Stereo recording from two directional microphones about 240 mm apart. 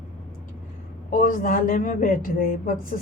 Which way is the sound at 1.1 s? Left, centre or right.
Left.